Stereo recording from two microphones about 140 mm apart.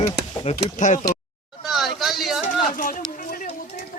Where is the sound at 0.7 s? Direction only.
65° left (ahead or behind).